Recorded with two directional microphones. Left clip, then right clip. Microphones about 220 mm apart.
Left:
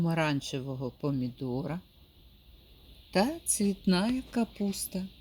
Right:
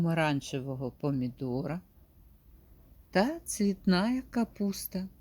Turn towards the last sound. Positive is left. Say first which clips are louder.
# even
turn(degrees=-5)  # may be behind; listen again after turning